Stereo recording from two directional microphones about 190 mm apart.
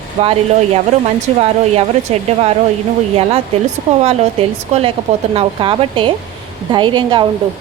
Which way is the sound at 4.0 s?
35° right (ahead or behind).